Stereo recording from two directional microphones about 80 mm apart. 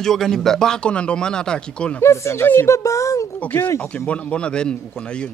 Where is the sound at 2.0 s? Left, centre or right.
Left.